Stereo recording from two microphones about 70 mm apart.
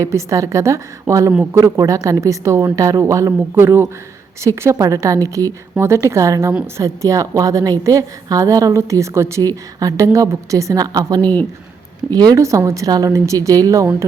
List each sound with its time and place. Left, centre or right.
0.0 s a woman's voice: right
3.5 s speech: right
4.7 s a woman's voice: right
5.8 s a woman's voice: right
8.7 s a woman's voice: right
9.4 s a woman's voice: right
11.2 s speech: left
12.1 s speech: right
12.4 s a woman's voice: right